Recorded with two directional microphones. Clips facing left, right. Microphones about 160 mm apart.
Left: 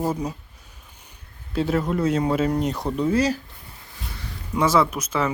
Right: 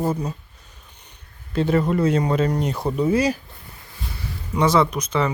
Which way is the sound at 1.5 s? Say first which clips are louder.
Right 3 dB; centre (ahead or behind).